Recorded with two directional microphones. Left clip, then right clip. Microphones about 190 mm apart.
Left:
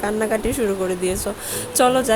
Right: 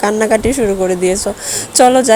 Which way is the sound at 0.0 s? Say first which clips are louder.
Right 9 dB; 25° right (ahead or behind).